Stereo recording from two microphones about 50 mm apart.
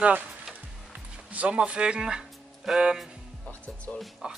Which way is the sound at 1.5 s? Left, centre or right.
Right.